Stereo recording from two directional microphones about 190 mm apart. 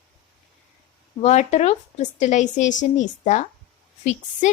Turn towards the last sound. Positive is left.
turn(degrees=35)  # may be behind; listen again after turning